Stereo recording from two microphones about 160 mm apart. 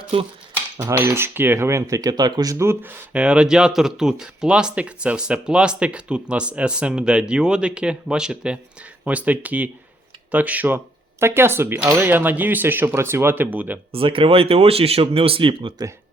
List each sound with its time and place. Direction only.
0.8 s speech: 15° right (ahead or behind)
13.9 s speech: 35° right (ahead or behind)